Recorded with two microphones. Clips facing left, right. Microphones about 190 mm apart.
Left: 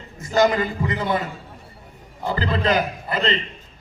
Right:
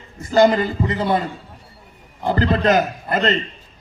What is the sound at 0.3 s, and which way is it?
Speech, 35° right (ahead or behind).